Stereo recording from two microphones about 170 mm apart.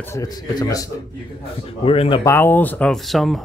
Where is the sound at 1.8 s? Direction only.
35° left (ahead or behind).